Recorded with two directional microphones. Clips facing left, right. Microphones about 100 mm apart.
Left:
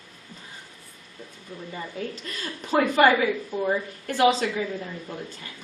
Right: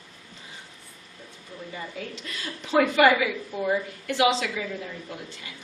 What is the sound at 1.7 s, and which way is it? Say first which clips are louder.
A woman's voice: left 3 dB; 45° left (ahead or behind).